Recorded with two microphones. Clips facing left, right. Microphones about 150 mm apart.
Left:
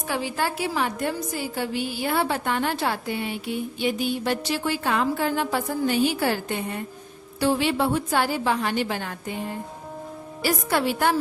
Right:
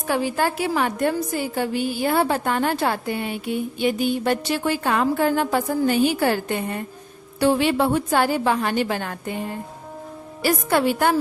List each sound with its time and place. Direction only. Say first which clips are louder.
0.1 s a woman's voice: right 5 dB; 50° right (ahead or behind)
10.4 s a woman's voice: right 4 dB; 50° right (ahead or behind)